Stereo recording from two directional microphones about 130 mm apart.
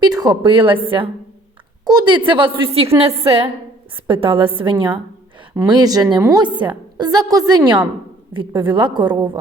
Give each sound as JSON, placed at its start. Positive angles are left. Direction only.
{"t": 0.0, "sound": "a woman's voice", "side_deg": -30}
{"t": 1.8, "sound": "a woman's voice", "side_deg": -30}